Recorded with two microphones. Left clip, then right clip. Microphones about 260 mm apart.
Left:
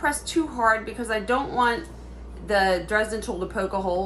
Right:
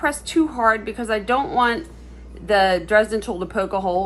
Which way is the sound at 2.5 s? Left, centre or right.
Right.